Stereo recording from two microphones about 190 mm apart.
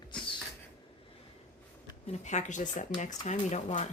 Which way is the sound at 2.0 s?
35° left (ahead or behind).